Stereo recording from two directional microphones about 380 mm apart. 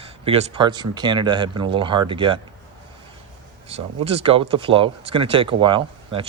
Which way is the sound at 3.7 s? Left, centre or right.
Centre.